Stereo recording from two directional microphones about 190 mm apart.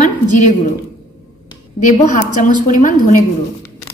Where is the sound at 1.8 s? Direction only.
40° left (ahead or behind).